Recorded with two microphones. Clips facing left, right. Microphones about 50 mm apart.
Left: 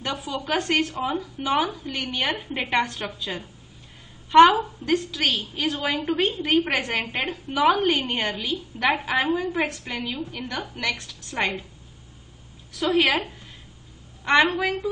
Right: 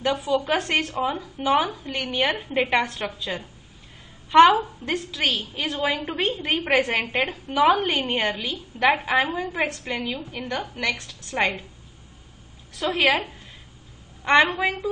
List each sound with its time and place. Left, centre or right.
0.0 s a woman's voice: centre
6.4 s a woman's voice: centre
9.2 s a woman's voice: centre
12.7 s a woman's voice: centre
14.2 s a woman's voice: centre
14.5 s a woman's voice: right